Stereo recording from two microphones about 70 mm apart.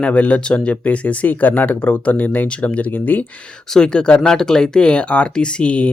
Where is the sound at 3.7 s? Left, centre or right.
Centre.